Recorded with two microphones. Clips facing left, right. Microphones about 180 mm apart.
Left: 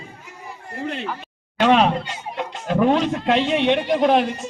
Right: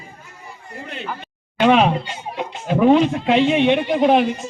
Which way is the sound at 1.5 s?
10° right (ahead or behind).